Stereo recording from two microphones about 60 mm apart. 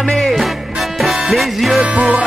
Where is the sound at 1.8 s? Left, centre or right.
Right.